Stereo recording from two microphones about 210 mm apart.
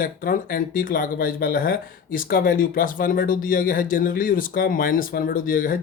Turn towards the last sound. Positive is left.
turn(degrees=40)  # may be behind; listen again after turning